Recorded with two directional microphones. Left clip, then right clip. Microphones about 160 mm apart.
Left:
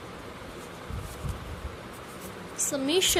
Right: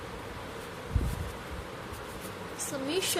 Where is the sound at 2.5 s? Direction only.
50° left (ahead or behind).